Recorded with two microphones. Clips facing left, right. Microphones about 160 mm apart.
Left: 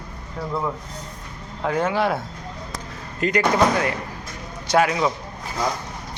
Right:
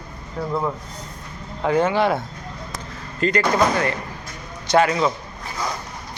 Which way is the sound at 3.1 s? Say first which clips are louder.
Right 1 dB; 15° left (ahead or behind).